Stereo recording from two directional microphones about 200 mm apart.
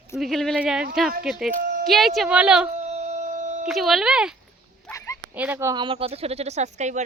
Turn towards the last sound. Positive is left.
turn(degrees=-35)  # may be behind; listen again after turning